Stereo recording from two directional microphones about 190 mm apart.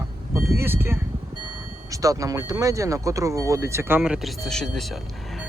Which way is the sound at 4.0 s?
Centre (ahead or behind).